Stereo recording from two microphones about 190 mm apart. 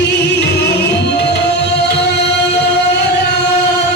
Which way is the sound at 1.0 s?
60° left (ahead or behind).